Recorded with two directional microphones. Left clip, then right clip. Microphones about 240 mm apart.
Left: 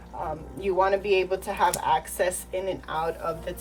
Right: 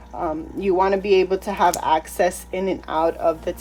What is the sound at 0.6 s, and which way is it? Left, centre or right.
Speech, right.